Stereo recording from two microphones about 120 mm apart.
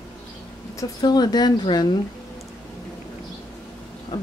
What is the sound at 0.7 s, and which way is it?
A woman's voice, 30° left (ahead or behind).